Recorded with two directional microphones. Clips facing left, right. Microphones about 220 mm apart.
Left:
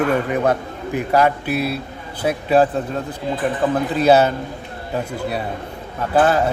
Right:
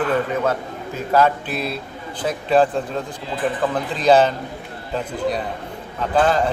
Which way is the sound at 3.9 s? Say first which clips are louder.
Left 1 dB; 10° left (ahead or behind).